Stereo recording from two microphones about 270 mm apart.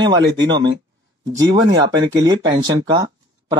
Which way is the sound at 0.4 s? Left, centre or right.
Centre.